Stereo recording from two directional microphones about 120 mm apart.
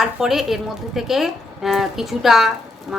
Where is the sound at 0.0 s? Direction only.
5° right (ahead or behind).